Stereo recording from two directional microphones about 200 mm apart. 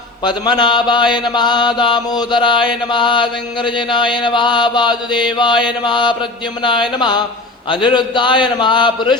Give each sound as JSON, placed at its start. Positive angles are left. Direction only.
{"t": 0.3, "sound": "mantra", "side_deg": 20}